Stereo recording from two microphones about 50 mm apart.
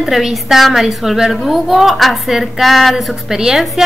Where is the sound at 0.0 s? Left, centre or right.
Centre.